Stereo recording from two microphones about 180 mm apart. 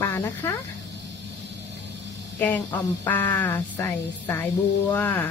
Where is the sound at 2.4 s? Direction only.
10° left (ahead or behind).